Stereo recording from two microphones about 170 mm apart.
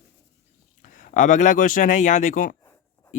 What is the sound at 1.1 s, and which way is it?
Speech, 50° left (ahead or behind).